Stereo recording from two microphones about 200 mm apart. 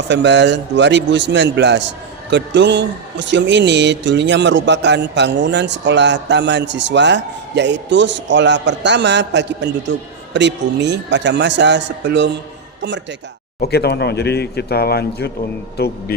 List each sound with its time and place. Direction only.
0.1 s speech: 60° right (ahead or behind)
13.6 s speech: 55° left (ahead or behind)